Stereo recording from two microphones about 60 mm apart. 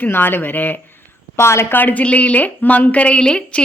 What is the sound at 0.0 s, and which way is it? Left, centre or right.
Speech, left.